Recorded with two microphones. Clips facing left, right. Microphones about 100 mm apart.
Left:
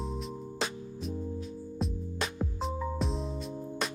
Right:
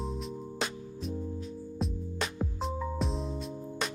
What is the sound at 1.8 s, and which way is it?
Music, centre (ahead or behind).